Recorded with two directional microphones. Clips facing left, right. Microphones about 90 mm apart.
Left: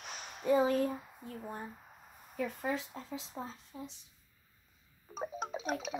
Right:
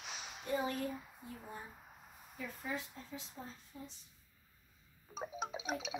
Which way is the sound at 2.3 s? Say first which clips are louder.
Left 7 dB; 80° left.